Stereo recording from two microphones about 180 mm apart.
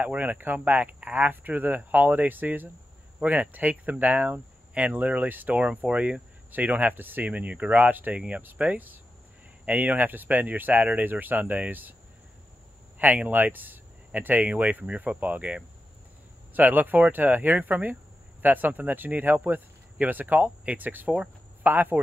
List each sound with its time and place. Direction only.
0.0 s speech: 10° right (ahead or behind)
13.0 s speech: 10° right (ahead or behind)